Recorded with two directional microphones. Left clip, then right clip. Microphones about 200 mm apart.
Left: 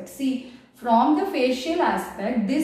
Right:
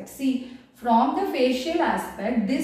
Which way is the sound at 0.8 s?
10° right (ahead or behind).